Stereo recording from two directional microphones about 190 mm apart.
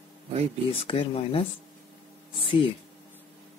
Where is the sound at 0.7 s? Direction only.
30° left (ahead or behind).